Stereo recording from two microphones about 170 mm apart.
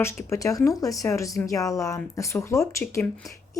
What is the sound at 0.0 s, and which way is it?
Speech, 15° left (ahead or behind).